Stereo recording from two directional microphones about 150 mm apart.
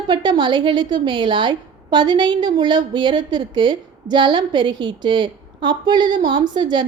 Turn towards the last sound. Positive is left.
turn(degrees=-30)  # may be behind; listen again after turning